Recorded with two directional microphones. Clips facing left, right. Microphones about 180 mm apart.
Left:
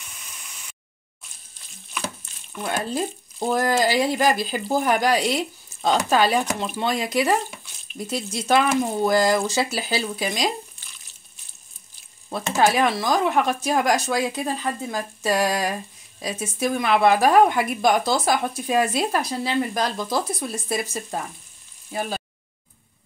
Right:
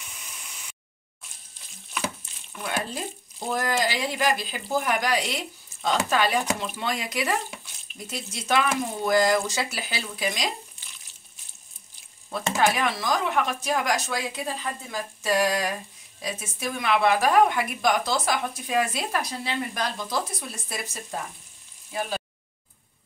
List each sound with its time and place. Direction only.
2.6 s a woman's voice: 35° left (ahead or behind)
12.3 s a woman's voice: 35° left (ahead or behind)